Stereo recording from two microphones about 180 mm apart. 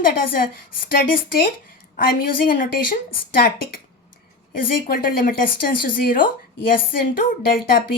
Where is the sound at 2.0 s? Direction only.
50° left (ahead or behind).